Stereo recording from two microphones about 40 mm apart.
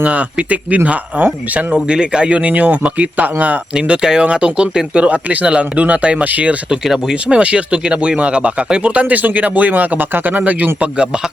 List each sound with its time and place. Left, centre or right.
0.0 s speech: right
1.9 s speech: right
3.8 s speech: right
4.9 s speech: right
7.1 s speech: right
10.8 s speech: right